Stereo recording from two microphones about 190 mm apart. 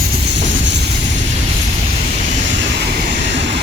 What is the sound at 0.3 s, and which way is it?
Train, 70° right (ahead or behind).